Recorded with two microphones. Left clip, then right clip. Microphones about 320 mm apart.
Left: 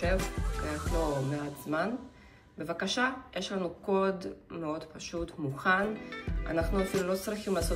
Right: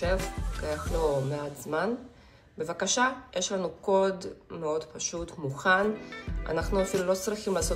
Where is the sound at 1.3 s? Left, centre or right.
Centre.